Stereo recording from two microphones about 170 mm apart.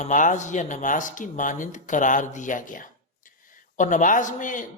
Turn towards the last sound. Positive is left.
turn(degrees=50)  # may be behind; listen again after turning